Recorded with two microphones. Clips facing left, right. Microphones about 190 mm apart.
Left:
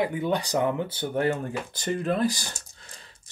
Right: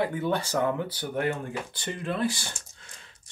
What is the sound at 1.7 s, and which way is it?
Speech, 40° left (ahead or behind).